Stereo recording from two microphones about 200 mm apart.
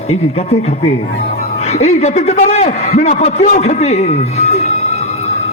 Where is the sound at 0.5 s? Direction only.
30° left (ahead or behind).